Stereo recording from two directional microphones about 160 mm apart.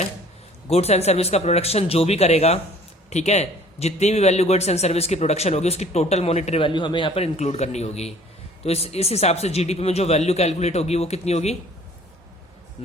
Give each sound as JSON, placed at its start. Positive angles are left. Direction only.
{"t": 0.7, "sound": "a man's voice", "side_deg": 40}